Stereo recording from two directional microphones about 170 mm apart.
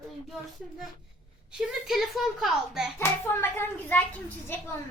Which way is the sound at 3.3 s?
15° left (ahead or behind).